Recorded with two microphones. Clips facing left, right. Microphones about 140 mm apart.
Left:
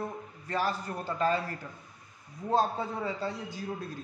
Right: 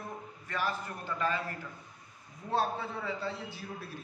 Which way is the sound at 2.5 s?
40° left (ahead or behind).